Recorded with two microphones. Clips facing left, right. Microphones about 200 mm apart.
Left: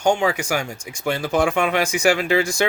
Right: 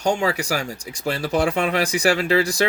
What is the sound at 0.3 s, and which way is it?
Speech, 35° right (ahead or behind).